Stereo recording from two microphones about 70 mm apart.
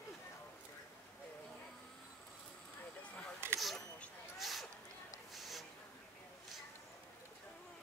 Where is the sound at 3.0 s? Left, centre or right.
Centre.